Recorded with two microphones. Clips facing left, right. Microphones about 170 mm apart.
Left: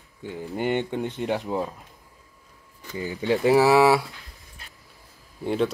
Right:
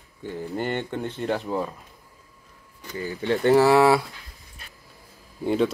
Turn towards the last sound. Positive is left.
turn(degrees=0)  # may be behind; listen again after turning